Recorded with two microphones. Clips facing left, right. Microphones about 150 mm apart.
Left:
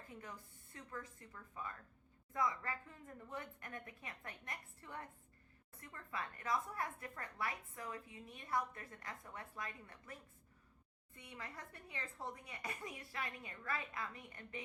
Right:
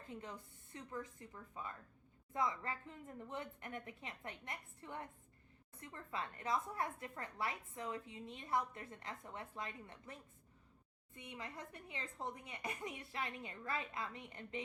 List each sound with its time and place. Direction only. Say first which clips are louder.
0.0 s a woman's voice: right 3 dB; 20° right (ahead or behind)